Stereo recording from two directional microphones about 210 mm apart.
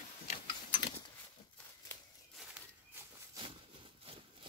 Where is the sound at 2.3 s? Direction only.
5° right (ahead or behind).